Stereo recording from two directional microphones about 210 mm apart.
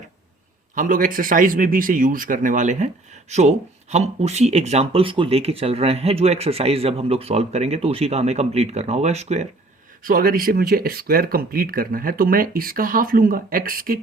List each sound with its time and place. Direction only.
0.8 s a man's voice: 40° right (ahead or behind)
10.0 s speech: 40° right (ahead or behind)